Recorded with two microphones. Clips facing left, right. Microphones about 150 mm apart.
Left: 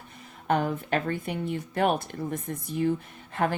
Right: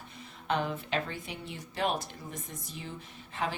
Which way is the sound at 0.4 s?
50° left (ahead or behind).